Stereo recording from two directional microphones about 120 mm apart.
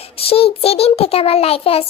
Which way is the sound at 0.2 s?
55° left (ahead or behind).